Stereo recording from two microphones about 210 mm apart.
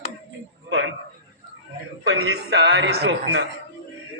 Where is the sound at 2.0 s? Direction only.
55° right (ahead or behind).